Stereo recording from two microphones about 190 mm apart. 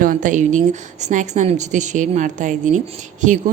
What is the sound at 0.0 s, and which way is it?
A woman's voice, 45° right (ahead or behind).